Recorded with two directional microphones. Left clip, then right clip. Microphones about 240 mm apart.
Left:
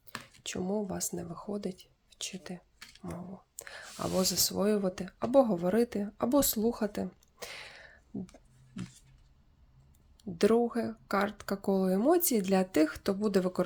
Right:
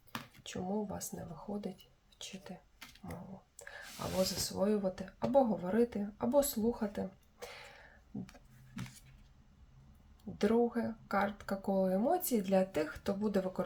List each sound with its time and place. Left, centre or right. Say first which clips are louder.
0.4 s speech: left 5 dB; left
4.2 s speech: left 3 dB; left
10.3 s speech: left 5 dB; left